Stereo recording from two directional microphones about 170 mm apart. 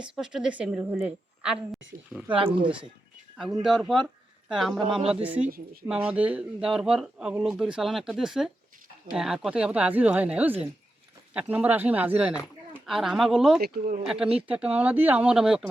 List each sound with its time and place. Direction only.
0.0 s speech: 5° right (ahead or behind)
3.6 s speech: centre (ahead or behind)
5.5 s speech: 60° right (ahead or behind)
5.8 s speech: 10° right (ahead or behind)